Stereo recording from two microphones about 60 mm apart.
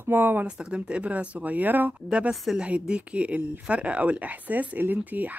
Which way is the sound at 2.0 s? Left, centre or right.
Centre.